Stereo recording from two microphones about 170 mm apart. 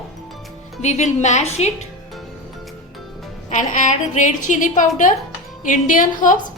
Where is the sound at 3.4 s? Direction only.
50° left (ahead or behind).